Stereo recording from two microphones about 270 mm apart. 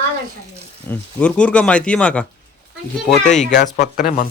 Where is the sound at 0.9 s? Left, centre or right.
Centre.